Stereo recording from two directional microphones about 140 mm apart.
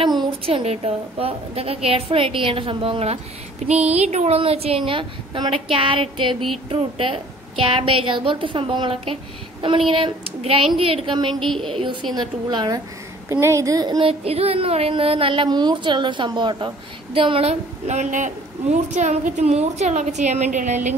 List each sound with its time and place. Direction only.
0.2 s a woman's voice: 40° right (ahead or behind)
11.3 s a woman's voice: centre (ahead or behind)
12.2 s a woman's voice: 30° right (ahead or behind)
14.2 s speech: 45° right (ahead or behind)